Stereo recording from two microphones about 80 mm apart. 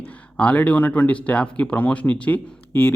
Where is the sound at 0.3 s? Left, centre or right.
Centre.